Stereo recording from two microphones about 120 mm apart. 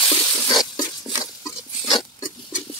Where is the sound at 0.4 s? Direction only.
35° left (ahead or behind).